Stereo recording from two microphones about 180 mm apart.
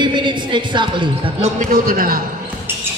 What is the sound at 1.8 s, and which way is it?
Speech, 50° right (ahead or behind).